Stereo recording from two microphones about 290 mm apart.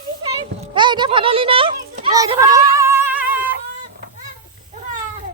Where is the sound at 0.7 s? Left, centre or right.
Centre.